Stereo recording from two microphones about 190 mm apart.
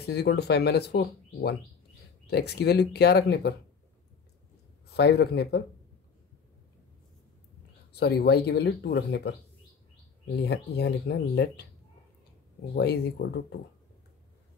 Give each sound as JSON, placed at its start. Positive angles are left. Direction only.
{"t": 0.1, "sound": "speech", "side_deg": 60}
{"t": 4.8, "sound": "speech", "side_deg": 60}
{"t": 7.9, "sound": "speech", "side_deg": 60}
{"t": 10.4, "sound": "speech", "side_deg": 60}
{"t": 12.7, "sound": "speech", "side_deg": 60}